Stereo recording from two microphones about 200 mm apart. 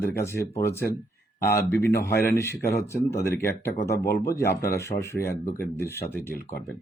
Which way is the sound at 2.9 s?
15° left (ahead or behind).